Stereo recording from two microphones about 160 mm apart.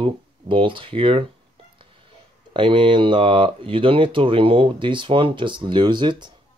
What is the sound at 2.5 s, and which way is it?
Speech, 30° right (ahead or behind).